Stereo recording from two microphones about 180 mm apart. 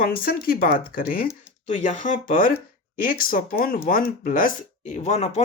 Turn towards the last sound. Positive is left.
turn(degrees=40)  # may be behind; listen again after turning